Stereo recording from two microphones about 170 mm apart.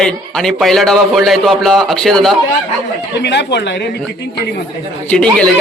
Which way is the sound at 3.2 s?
90° left.